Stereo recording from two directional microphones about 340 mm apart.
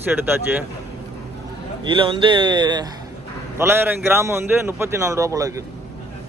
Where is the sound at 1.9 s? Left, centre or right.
Centre.